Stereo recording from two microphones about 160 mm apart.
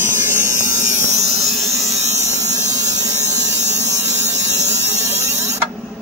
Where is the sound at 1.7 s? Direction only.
20° right (ahead or behind).